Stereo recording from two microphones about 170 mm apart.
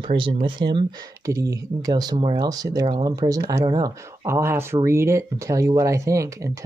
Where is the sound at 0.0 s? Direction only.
30° right (ahead or behind).